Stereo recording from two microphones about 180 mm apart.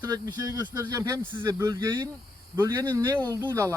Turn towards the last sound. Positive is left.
turn(degrees=-15)  # may be behind; listen again after turning